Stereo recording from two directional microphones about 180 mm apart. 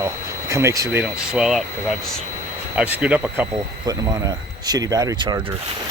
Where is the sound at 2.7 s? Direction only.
5° right (ahead or behind).